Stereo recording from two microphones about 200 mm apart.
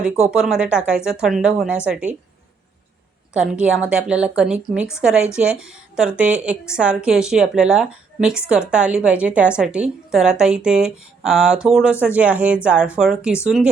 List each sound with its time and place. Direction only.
0.0 s a woman's voice: 5° right (ahead or behind)
3.3 s a woman's voice: 5° right (ahead or behind)